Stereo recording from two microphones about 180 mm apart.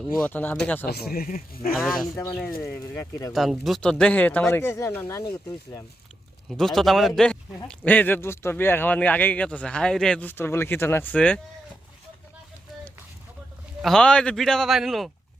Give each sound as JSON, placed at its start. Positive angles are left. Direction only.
{"t": 0.2, "sound": "speech", "side_deg": 10}
{"t": 0.9, "sound": "speech", "side_deg": 60}
{"t": 2.1, "sound": "speech", "side_deg": 15}
{"t": 3.3, "sound": "speech", "side_deg": 0}
{"t": 6.5, "sound": "a man's voice", "side_deg": 0}
{"t": 13.8, "sound": "a man's voice", "side_deg": 5}